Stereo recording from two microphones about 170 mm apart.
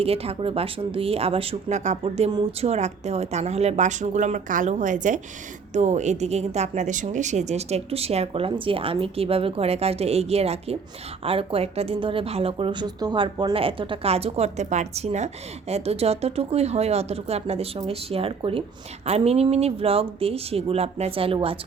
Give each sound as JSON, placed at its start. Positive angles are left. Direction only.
{"t": 0.0, "sound": "speech", "side_deg": -35}